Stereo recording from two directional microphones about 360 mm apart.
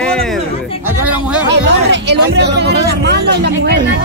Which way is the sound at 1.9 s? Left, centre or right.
Right.